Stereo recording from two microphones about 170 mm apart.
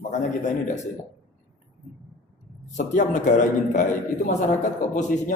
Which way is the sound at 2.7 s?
45° left (ahead or behind).